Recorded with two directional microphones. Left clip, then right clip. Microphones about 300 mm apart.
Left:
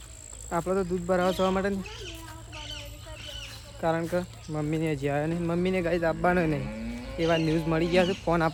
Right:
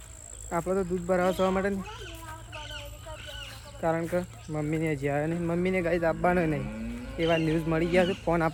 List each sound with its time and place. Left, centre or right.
0.5 s speech: centre
3.8 s speech: centre
6.7 s a sound: left
7.2 s speech: centre